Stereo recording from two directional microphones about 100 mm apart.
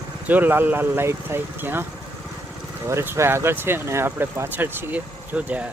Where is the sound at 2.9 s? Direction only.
30° right (ahead or behind).